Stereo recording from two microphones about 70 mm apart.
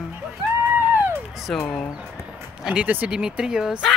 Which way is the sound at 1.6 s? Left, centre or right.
Centre.